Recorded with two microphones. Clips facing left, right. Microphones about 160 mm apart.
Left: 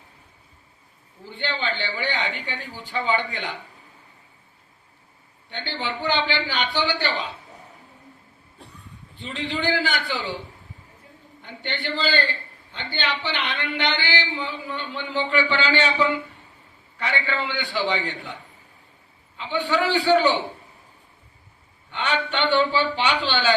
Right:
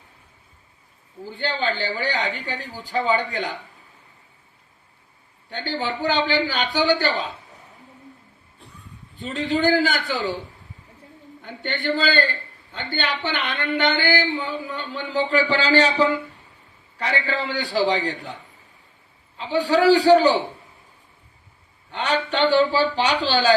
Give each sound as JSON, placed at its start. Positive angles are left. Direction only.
{"t": 1.2, "sound": "speech", "side_deg": -40}
{"t": 5.5, "sound": "a woman's voice", "side_deg": -40}
{"t": 9.1, "sound": "a woman's voice", "side_deg": -45}
{"t": 11.4, "sound": "a woman's voice", "side_deg": -45}
{"t": 19.4, "sound": "speech", "side_deg": -35}
{"t": 21.9, "sound": "speech", "side_deg": -40}